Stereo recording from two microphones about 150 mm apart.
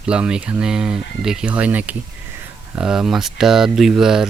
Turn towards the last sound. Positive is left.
turn(degrees=-5)  # may be behind; listen again after turning